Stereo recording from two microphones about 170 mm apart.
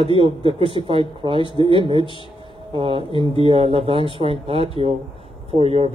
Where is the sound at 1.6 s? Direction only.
30° right (ahead or behind).